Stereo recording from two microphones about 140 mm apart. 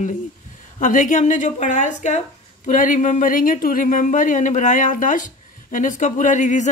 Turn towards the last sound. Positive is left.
turn(degrees=60)  # may be behind; listen again after turning